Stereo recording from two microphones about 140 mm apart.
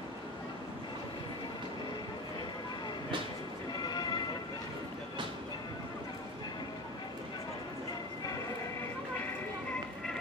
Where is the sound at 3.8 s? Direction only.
30° left (ahead or behind).